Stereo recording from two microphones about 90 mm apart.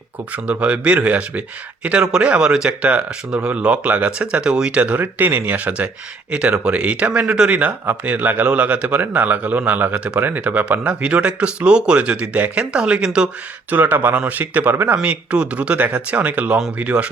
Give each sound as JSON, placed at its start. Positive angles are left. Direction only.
{"t": 0.4, "sound": "a man's voice", "side_deg": -15}
{"t": 13.7, "sound": "a man's voice", "side_deg": -20}